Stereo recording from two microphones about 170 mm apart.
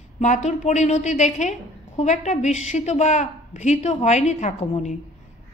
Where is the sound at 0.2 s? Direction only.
45° left (ahead or behind).